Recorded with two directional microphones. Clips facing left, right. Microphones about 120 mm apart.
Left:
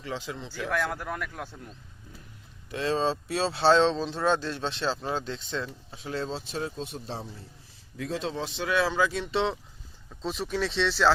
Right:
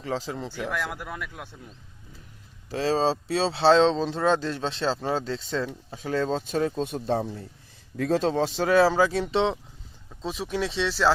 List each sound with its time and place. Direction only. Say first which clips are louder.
0.0 s speech: right 5 dB; 35° right (ahead or behind)
0.5 s speech: left 4 dB; centre (ahead or behind)
2.6 s speech: right 3 dB; 35° right (ahead or behind)
5.9 s speech: right 7 dB; 50° right (ahead or behind); by 9.6 s 25° right (ahead or behind)
10.2 s speech: right 1 dB; 10° right (ahead or behind)